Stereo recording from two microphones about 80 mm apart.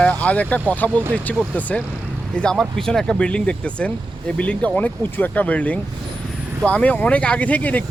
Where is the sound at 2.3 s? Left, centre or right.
Centre.